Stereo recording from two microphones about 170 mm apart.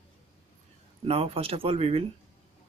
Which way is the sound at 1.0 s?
35° right (ahead or behind).